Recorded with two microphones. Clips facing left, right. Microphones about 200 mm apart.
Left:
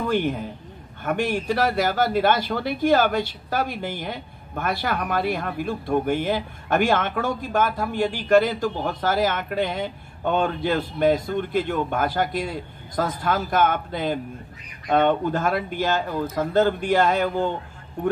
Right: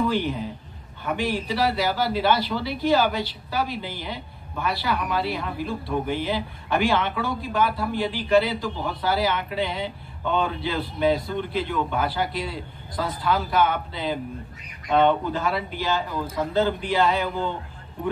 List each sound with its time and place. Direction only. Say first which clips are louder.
0.1 s a man's voice: left 2 dB; 50° left (ahead or behind)